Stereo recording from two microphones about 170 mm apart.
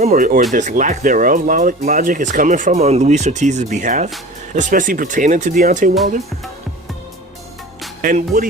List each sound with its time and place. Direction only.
0.0 s speech: 45° right (ahead or behind)
8.0 s speech: 55° right (ahead or behind)